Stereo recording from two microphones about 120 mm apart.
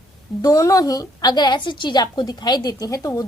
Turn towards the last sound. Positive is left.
turn(degrees=30)  # may be behind; listen again after turning